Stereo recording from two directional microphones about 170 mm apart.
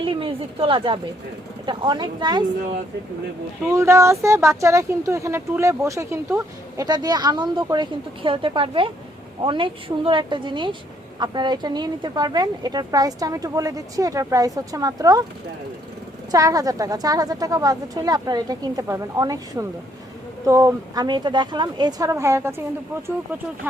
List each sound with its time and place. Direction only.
0.0 s speech: 30° right (ahead or behind)
3.7 s speech: 15° right (ahead or behind)
16.3 s speech: 20° right (ahead or behind)